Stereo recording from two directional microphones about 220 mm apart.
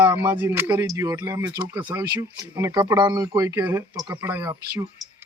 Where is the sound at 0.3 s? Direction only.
10° right (ahead or behind).